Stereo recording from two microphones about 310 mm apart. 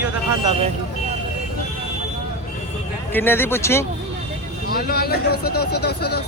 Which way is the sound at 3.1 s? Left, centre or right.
Centre.